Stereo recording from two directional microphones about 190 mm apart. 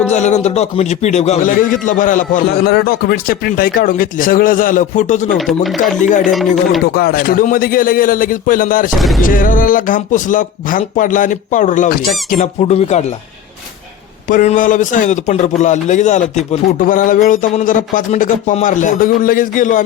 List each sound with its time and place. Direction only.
0.1 s a man's voice: 35° left (ahead or behind)
5.6 s speech: centre (ahead or behind)
6.0 s a man's voice: 40° left (ahead or behind)
6.8 s a man's voice: 55° left (ahead or behind)
9.0 s speech: centre (ahead or behind)
9.2 s a man's voice: 45° left (ahead or behind)
12.3 s a man's voice: 35° left (ahead or behind)
14.3 s a man's voice: 45° left (ahead or behind)